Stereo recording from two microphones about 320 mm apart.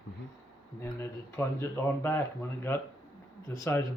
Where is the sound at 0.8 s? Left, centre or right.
Centre.